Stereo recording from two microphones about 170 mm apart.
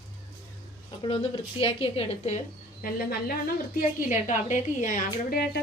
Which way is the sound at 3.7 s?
45° left (ahead or behind).